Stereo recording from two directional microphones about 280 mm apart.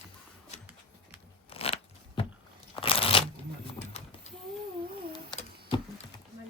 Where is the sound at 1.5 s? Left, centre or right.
Centre.